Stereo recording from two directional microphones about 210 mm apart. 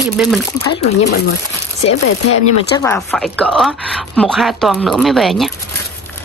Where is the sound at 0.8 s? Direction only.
55° left (ahead or behind).